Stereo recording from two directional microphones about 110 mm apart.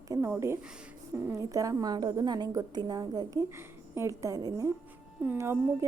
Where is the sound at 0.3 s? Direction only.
25° right (ahead or behind).